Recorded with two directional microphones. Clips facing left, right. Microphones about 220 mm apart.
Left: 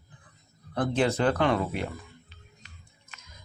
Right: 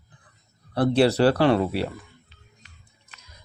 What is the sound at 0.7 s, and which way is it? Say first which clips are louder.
Speech: right 6 dB; 35° right (ahead or behind).